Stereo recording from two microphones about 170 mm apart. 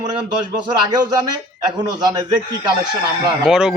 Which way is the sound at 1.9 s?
25° right (ahead or behind).